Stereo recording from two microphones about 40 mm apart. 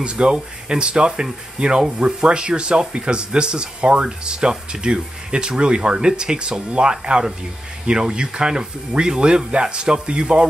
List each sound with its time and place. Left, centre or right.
0.0 s speech: right